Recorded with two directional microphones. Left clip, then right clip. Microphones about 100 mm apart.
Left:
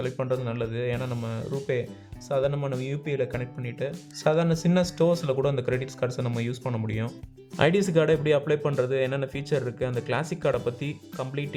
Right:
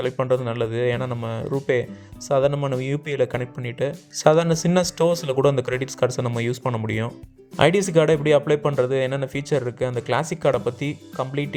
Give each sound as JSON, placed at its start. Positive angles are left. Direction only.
{"t": 0.0, "sound": "speech", "side_deg": -45}
{"t": 7.5, "sound": "speech", "side_deg": -30}